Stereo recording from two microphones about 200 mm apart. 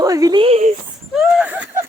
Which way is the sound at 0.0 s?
20° right (ahead or behind).